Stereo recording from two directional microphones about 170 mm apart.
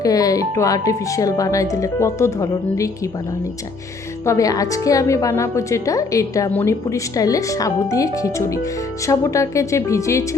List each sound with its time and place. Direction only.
0.0 s a woman's voice: 20° left (ahead or behind)
4.3 s a woman's voice: 20° left (ahead or behind)